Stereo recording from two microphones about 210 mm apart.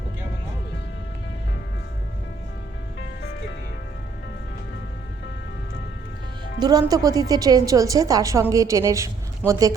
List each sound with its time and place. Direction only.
6.6 s a woman's voice: 20° right (ahead or behind)